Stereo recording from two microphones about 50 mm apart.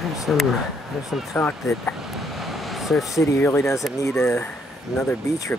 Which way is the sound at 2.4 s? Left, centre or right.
Centre.